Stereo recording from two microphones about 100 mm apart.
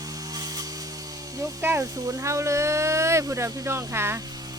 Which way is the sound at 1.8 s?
30° right (ahead or behind).